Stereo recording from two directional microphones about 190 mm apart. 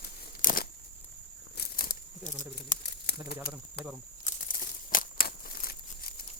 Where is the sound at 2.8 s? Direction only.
60° left (ahead or behind).